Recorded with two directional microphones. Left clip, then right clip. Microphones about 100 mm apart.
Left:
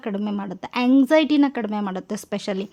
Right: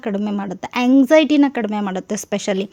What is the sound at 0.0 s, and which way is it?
Speech, 30° right (ahead or behind).